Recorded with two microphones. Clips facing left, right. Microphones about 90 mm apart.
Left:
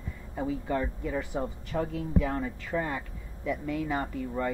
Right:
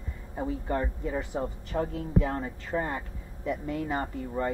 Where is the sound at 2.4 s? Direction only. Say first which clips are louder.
Even; 25° right (ahead or behind).